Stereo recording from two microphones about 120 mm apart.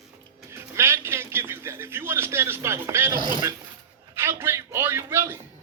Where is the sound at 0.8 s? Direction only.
20° right (ahead or behind).